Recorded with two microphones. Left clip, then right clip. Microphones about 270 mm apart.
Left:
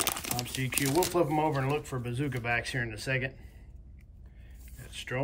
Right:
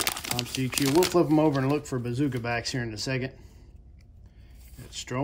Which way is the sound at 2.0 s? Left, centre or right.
Centre.